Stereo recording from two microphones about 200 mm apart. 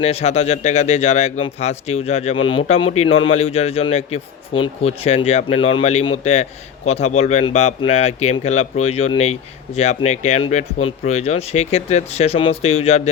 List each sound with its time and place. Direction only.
0.0 s speech: 30° left (ahead or behind)